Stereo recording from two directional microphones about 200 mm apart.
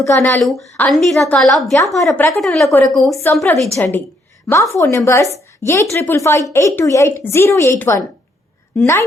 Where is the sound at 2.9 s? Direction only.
Centre (ahead or behind).